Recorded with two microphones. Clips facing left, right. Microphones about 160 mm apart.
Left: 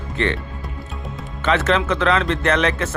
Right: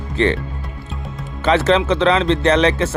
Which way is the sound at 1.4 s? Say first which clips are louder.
Right 4 dB; 30° right (ahead or behind).